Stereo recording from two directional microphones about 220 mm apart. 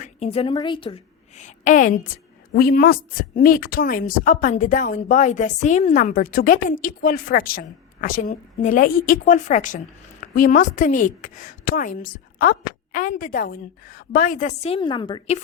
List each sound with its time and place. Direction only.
0.0 s a woman's voice: 30° left (ahead or behind)